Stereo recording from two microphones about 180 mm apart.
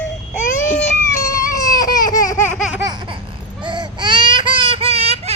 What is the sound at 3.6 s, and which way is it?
Baby cry, 25° right (ahead or behind).